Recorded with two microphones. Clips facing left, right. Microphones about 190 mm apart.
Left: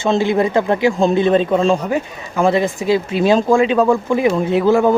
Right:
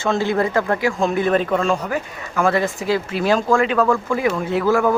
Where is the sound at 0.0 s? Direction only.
20° left (ahead or behind).